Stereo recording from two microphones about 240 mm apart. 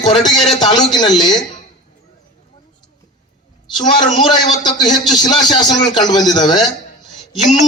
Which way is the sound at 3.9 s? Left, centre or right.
Centre.